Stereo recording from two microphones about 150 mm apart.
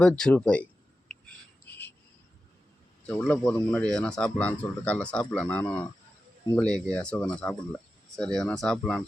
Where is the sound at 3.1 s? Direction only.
10° left (ahead or behind).